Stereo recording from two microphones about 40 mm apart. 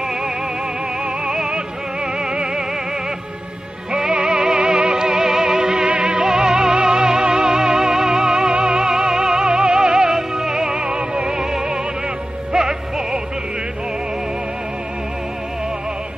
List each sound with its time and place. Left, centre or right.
1.2 s music: centre
2.3 s music: right
4.2 s music: right
5.9 s music: right
6.2 s music: centre
8.8 s music: centre
10.9 s music: right
12.5 s music: centre